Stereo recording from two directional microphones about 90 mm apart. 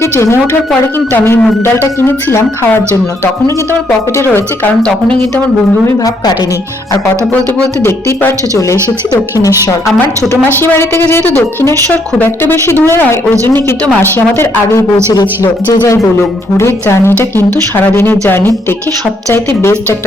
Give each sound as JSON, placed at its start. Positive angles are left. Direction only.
{"t": 0.0, "sound": "a woman's voice", "side_deg": 30}
{"t": 4.2, "sound": "speech", "side_deg": 25}
{"t": 7.9, "sound": "speech", "side_deg": 30}
{"t": 10.5, "sound": "speech", "side_deg": 25}
{"t": 16.9, "sound": "speech", "side_deg": 25}